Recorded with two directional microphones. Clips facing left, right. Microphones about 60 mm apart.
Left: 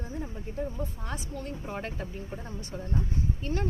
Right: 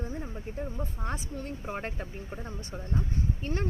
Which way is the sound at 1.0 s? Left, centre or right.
Right.